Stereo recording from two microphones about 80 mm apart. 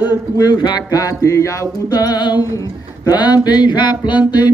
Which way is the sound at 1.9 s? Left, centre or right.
Left.